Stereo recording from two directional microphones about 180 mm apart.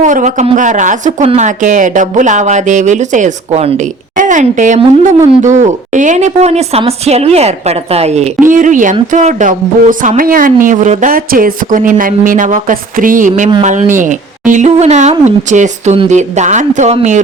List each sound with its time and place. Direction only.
0.0 s a woman's voice: 45° right (ahead or behind)